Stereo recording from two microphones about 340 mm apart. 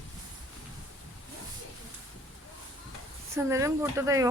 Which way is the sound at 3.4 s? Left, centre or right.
Centre.